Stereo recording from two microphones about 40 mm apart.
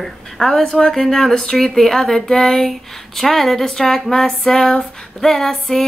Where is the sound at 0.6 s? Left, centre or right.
Centre.